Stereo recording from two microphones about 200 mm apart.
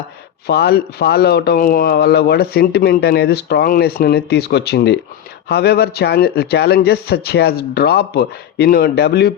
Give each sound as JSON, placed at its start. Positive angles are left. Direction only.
{"t": 0.4, "sound": "speech", "side_deg": 55}